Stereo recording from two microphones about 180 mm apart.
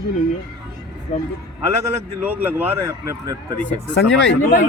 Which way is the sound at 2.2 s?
10° right (ahead or behind).